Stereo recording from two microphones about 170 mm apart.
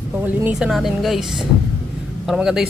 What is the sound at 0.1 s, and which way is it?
Speech, 10° right (ahead or behind).